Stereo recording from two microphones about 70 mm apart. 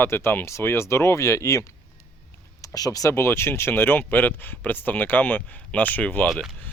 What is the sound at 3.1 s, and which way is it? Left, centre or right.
Speech, left.